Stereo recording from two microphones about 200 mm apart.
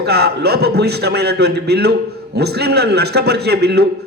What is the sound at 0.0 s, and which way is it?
A man's voice, 55° right (ahead or behind).